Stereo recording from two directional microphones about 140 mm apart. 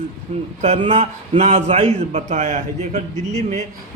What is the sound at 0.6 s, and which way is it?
A man's voice, 45° right (ahead or behind).